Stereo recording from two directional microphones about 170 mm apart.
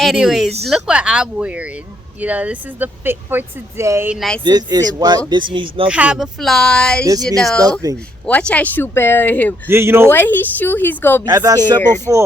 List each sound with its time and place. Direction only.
0.0 s speech: centre (ahead or behind)
4.1 s speech: centre (ahead or behind)
4.4 s speech: 25° right (ahead or behind)
5.9 s speech: 5° right (ahead or behind)
7.6 s speech: 20° right (ahead or behind)
8.3 s speech: 10° left (ahead or behind)
9.6 s speech: 15° right (ahead or behind)
10.1 s speech: 10° left (ahead or behind)
11.3 s speech: 20° right (ahead or behind)